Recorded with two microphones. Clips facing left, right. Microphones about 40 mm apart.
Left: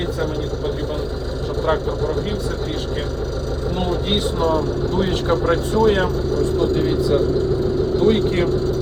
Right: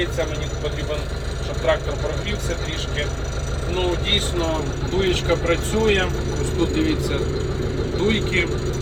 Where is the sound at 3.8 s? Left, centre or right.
Right.